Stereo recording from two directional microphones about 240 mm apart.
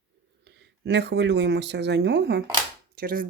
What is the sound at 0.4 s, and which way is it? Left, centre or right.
Speech, right.